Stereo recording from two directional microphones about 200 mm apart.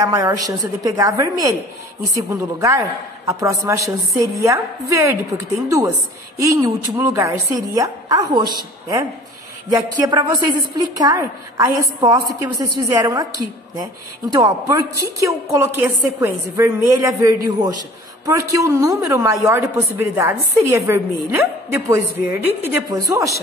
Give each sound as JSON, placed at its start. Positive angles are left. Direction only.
{"t": 0.0, "sound": "a woman's voice", "side_deg": -15}
{"t": 6.4, "sound": "a woman's voice", "side_deg": -15}
{"t": 14.3, "sound": "a woman's voice", "side_deg": -15}